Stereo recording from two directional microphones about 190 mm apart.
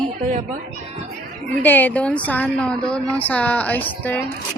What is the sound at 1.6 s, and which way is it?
A woman's voice, 10° left (ahead or behind).